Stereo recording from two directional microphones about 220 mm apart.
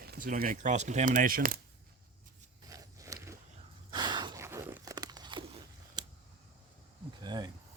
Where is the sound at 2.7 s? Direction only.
15° right (ahead or behind).